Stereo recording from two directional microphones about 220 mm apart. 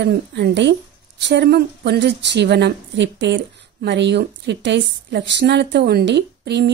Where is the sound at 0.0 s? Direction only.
50° right (ahead or behind).